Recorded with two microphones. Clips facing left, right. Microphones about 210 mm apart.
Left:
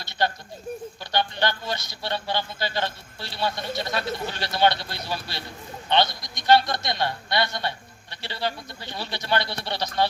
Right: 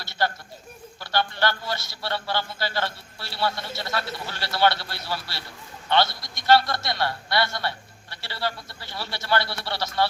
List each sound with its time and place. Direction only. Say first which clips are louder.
0.0 s a man's voice: left 1 dB; 20° left (ahead or behind)